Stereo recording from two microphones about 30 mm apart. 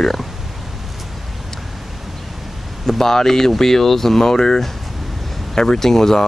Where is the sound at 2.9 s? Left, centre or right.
Centre.